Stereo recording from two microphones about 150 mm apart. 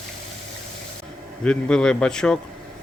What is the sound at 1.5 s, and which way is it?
Speech, 5° left (ahead or behind).